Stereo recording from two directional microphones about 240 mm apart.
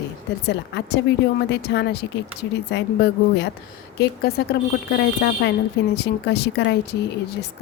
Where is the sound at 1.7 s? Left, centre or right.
Left.